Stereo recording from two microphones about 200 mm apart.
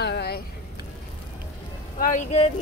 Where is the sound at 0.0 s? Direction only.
55° left (ahead or behind).